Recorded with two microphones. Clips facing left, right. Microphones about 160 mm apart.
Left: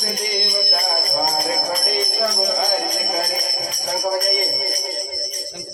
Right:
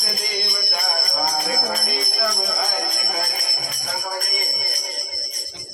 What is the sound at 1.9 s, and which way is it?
Jingle bell, 35° left (ahead or behind).